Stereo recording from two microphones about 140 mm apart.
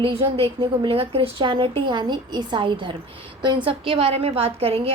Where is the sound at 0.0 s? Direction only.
40° right (ahead or behind).